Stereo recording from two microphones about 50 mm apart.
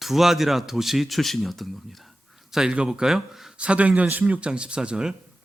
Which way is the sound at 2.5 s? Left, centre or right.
Centre.